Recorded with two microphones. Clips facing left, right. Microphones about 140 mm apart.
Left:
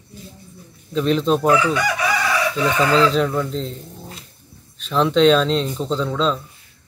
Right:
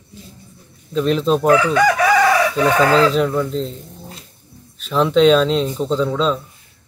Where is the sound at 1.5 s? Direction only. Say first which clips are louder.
Right 5 dB; 50° right (ahead or behind).